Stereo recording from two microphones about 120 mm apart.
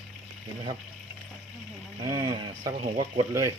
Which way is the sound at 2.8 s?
60° right (ahead or behind).